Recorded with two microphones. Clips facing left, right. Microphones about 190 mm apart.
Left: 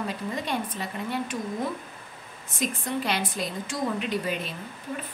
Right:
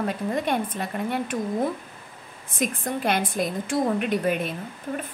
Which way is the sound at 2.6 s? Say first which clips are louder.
Right 3 dB; 50° right (ahead or behind).